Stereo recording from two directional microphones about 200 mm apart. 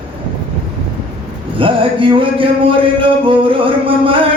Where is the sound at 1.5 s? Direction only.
25° right (ahead or behind).